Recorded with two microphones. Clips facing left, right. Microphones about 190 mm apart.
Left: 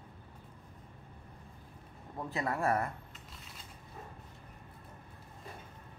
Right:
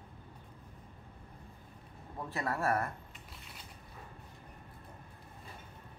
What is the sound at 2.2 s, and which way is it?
Speech, 15° left (ahead or behind).